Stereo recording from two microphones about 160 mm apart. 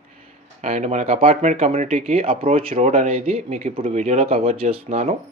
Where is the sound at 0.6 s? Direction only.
45° right (ahead or behind).